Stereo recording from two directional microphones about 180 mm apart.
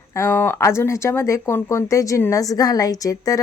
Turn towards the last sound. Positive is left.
turn(degrees=20)  # may be behind; listen again after turning